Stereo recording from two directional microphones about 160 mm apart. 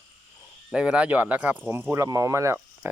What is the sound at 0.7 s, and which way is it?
Speech, 5° right (ahead or behind).